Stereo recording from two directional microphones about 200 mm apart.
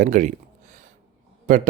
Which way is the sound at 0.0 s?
40° right (ahead or behind).